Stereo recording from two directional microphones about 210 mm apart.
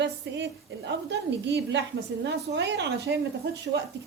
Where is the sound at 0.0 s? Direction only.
55° right (ahead or behind).